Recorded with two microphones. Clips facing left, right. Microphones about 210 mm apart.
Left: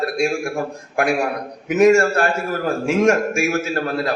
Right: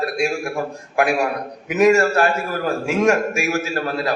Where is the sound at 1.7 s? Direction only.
45° left (ahead or behind).